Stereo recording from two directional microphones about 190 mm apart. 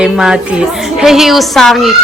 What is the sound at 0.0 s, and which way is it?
A woman's voice, 5° right (ahead or behind).